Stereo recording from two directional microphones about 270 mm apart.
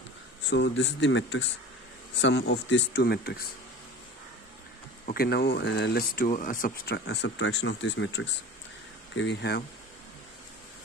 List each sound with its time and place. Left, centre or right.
0.5 s speech: left
5.0 s speech: left